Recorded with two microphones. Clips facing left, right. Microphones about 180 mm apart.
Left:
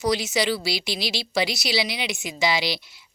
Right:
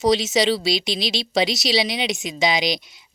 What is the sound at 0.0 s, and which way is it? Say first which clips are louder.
Speech: right 5 dB; 20° right (ahead or behind).